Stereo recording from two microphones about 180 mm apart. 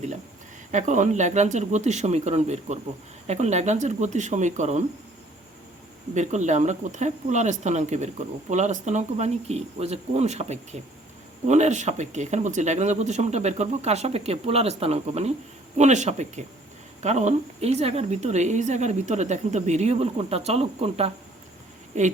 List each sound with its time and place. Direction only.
0.7 s speech: 40° right (ahead or behind)
6.1 s speech: 40° right (ahead or behind)